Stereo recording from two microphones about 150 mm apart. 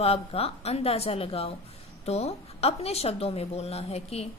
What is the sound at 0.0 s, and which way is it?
A woman's voice, 40° left (ahead or behind).